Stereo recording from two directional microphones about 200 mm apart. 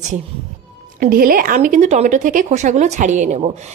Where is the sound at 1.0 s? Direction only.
45° right (ahead or behind).